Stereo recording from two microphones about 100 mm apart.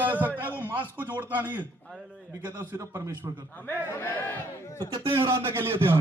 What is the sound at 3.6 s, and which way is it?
A man's voice, 25° left (ahead or behind).